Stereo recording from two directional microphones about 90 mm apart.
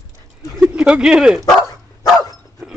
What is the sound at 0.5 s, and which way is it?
Speech, 10° right (ahead or behind).